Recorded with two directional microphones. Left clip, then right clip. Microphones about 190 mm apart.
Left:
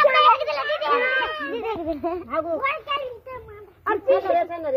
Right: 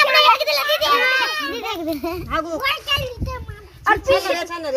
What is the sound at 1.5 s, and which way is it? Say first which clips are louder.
Speech: right 2 dB; 60° right (ahead or behind).